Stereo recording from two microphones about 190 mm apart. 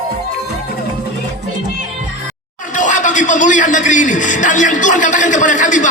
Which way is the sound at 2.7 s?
40° left (ahead or behind).